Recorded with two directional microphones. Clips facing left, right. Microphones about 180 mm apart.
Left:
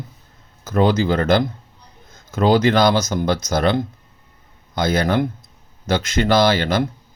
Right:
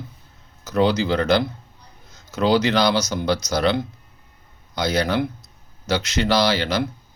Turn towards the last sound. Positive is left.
turn(degrees=50)  # may be behind; listen again after turning